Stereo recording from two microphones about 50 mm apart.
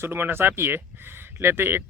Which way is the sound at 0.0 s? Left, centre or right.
Right.